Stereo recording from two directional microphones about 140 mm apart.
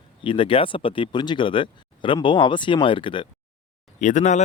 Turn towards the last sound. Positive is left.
turn(degrees=60)  # may be behind; listen again after turning